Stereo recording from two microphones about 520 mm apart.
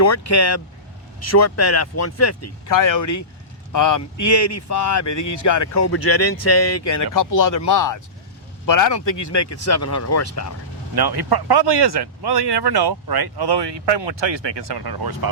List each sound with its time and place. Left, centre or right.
0.0 s speech: left
10.9 s speech: right